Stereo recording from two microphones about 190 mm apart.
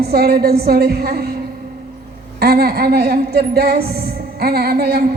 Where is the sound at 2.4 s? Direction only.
55° right (ahead or behind).